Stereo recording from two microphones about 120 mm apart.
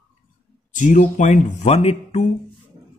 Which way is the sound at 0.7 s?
90° left.